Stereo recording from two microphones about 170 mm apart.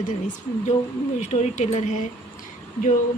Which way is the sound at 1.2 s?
45° left (ahead or behind).